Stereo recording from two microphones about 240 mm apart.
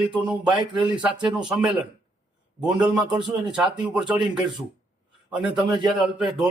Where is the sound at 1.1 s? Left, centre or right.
Centre.